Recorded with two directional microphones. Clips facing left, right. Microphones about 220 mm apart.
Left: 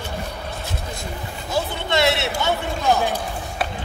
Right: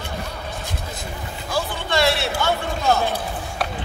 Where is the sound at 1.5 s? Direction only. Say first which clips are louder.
Left 1 dB; 20° left (ahead or behind).